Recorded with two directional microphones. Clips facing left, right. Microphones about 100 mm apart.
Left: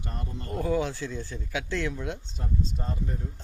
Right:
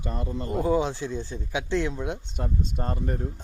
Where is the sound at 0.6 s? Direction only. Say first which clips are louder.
Right 3 dB; 20° right (ahead or behind).